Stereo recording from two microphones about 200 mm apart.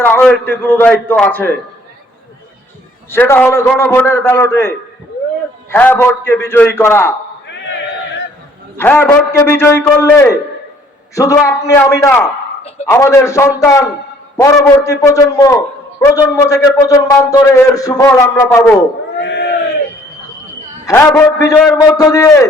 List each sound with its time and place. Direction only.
0.0 s a man's voice: 10° left (ahead or behind)
3.1 s a man's voice: 10° left (ahead or behind)
5.7 s a man's voice: 10° left (ahead or behind)
8.8 s a man's voice: 10° left (ahead or behind)
19.2 s crowd: 60° left (ahead or behind)
20.8 s a man's voice: 15° left (ahead or behind)